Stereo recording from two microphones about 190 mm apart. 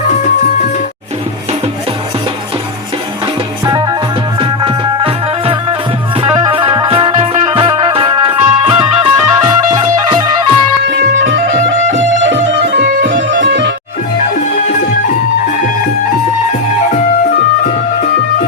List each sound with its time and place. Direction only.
4.4 s music: 25° right (ahead or behind)
10.8 s music: 70° right (ahead or behind)